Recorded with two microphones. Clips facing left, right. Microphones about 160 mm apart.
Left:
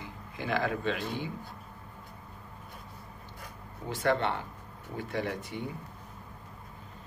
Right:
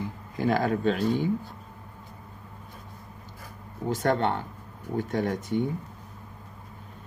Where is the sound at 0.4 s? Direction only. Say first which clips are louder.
Right 6 dB; 40° right (ahead or behind).